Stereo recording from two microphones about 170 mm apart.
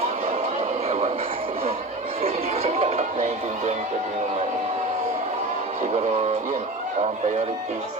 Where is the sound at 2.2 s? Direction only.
35° right (ahead or behind).